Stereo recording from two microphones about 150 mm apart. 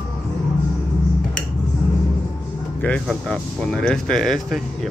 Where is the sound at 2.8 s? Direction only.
5° left (ahead or behind).